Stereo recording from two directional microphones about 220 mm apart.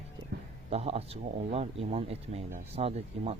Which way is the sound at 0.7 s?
30° right (ahead or behind).